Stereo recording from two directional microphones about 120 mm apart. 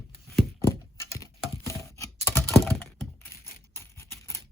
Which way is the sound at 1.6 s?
25° left (ahead or behind).